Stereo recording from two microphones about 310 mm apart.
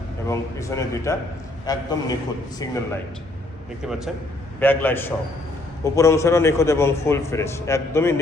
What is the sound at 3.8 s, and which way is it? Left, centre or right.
A man's voice, centre.